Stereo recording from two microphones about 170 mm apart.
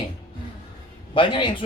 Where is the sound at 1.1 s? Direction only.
30° left (ahead or behind).